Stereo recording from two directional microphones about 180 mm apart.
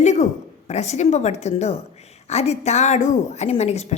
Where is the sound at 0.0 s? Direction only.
40° left (ahead or behind).